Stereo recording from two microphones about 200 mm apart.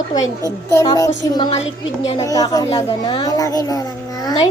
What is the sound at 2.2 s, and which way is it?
A child's voice, 20° left (ahead or behind).